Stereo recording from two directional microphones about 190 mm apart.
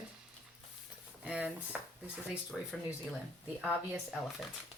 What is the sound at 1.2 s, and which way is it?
Speech, 5° right (ahead or behind).